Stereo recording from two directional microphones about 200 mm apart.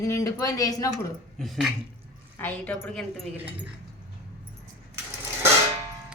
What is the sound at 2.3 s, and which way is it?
Speech, 10° left (ahead or behind).